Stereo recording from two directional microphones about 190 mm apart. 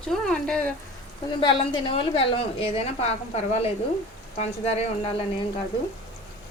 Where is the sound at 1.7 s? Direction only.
30° left (ahead or behind).